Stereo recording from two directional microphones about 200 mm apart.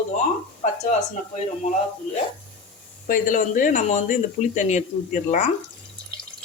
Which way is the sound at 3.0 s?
40° left (ahead or behind).